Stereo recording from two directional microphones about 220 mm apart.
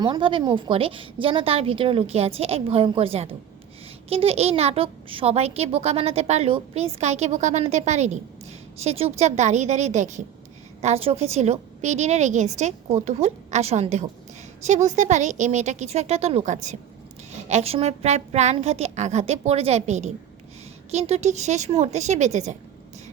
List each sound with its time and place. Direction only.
0.0 s a woman's voice: 20° right (ahead or behind)